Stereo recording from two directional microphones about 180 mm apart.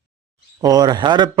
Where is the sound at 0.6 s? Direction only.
20° right (ahead or behind).